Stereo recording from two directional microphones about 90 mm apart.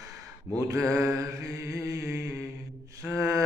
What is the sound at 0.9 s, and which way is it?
Mantra, 35° right (ahead or behind).